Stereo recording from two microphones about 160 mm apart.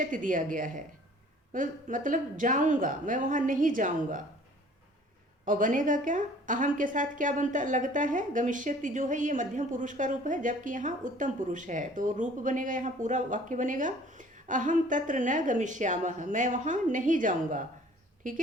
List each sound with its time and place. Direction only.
0.0 s speech: 55° right (ahead or behind)
5.5 s a woman's voice: 55° right (ahead or behind)